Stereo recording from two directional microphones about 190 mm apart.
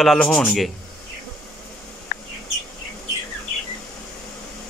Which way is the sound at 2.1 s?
50° left (ahead or behind).